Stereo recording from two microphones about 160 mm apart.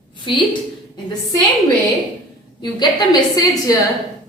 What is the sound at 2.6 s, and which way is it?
A woman's voice, 25° left (ahead or behind).